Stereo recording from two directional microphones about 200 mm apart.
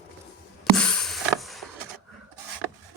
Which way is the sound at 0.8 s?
5° left (ahead or behind).